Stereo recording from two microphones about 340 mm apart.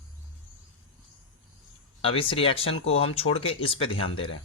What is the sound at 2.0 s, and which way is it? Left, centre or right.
Speech, centre.